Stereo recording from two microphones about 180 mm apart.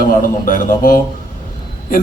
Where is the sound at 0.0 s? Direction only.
50° left (ahead or behind).